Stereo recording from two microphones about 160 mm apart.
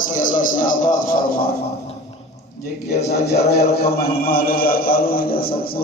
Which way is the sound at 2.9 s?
80° left.